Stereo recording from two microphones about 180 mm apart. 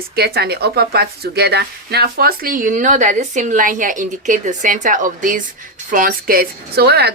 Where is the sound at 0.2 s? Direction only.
60° right (ahead or behind).